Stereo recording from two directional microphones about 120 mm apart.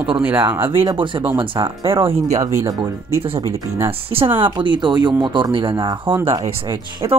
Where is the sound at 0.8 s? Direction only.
45° right (ahead or behind).